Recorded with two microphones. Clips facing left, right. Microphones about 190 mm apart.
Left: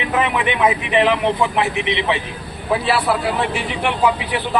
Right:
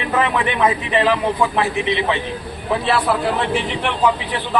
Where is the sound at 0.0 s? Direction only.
15° left (ahead or behind).